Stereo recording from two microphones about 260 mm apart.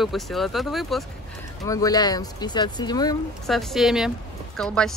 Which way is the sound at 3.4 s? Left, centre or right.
Centre.